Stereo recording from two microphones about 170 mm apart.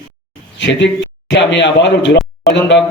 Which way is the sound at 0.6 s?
90° left.